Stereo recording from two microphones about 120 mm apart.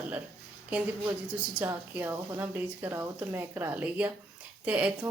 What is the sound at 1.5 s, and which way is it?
Speech, 15° right (ahead or behind).